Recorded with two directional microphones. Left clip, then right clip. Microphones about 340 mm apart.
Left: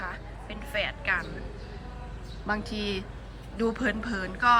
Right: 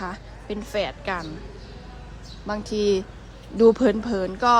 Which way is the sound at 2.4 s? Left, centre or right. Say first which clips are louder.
Right 7 dB; centre.